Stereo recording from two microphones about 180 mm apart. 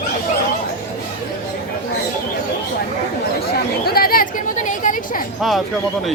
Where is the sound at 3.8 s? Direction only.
55° left (ahead or behind).